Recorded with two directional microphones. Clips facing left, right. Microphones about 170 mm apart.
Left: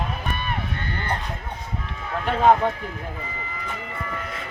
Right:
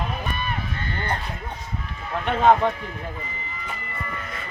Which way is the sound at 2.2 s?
5° left (ahead or behind).